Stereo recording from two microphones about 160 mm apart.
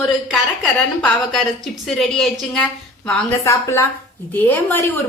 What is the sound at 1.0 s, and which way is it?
A woman's voice, centre (ahead or behind).